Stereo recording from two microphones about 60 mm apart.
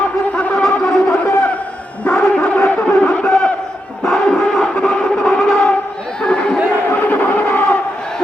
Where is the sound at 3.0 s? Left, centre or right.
Left.